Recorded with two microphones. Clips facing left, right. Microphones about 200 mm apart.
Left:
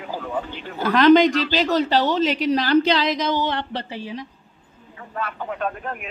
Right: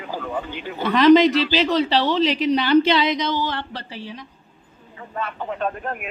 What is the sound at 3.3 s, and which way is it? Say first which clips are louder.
Speech: left 2 dB; 20° left (ahead or behind).